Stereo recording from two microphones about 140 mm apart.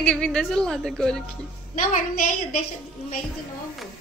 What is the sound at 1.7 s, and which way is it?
Speech, 90° left.